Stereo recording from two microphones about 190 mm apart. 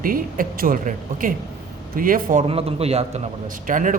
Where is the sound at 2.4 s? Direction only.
30° right (ahead or behind).